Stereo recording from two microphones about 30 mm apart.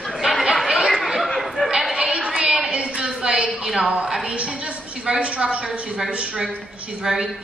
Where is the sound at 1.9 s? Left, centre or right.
Right.